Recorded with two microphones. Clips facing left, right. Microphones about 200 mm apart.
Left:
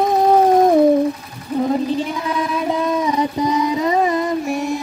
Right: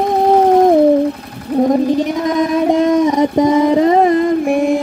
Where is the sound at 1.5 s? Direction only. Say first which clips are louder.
Right 6 dB; 60° right (ahead or behind).